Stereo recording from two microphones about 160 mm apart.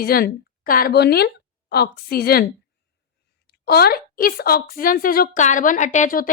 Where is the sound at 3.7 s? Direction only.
75° left (ahead or behind); by 6.3 s 60° left (ahead or behind).